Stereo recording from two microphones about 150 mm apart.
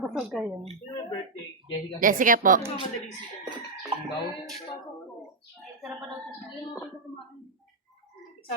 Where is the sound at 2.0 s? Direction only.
65° right (ahead or behind).